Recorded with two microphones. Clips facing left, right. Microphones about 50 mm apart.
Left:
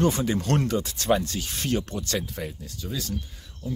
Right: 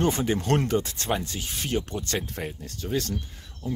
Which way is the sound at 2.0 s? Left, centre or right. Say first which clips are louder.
Even; right.